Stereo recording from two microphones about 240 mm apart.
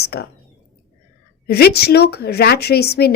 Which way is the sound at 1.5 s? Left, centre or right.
Left.